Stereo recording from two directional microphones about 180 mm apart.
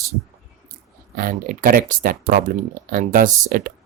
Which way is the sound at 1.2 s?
50° right (ahead or behind).